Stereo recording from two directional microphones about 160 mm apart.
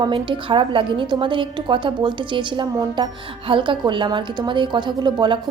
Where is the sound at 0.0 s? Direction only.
30° right (ahead or behind).